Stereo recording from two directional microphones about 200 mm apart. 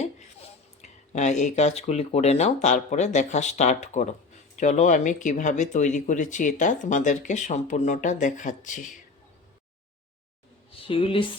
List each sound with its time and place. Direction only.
0.0 s speech: 35° left (ahead or behind)
10.7 s speech: 25° left (ahead or behind)